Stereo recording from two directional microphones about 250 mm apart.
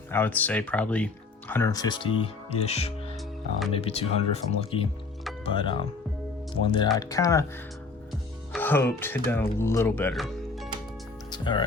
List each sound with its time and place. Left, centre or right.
0.1 s speech: centre
8.5 s speech: centre
11.3 s speech: centre